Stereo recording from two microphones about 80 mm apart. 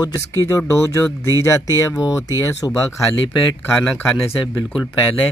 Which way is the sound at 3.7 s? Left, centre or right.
Centre.